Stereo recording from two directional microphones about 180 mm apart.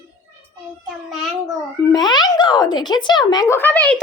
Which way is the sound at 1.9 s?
25° left (ahead or behind).